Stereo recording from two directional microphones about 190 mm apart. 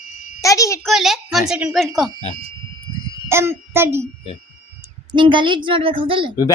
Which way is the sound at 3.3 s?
15° right (ahead or behind).